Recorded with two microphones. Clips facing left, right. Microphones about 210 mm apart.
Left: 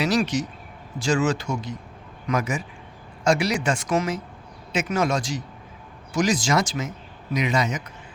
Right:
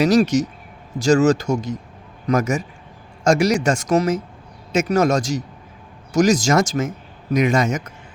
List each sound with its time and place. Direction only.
0.0 s speech: 45° right (ahead or behind)